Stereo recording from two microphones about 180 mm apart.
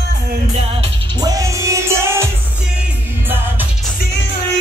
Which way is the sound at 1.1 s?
20° right (ahead or behind).